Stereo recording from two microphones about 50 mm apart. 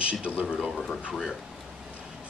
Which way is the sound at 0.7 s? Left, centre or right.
Centre.